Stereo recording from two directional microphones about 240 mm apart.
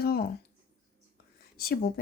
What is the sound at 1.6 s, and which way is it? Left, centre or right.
Speech, left.